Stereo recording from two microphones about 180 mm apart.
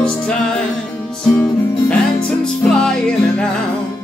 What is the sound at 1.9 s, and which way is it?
Music, 5° left (ahead or behind).